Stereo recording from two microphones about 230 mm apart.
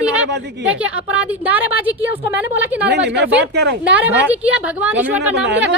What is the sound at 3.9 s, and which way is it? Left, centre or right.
A woman's voice, centre.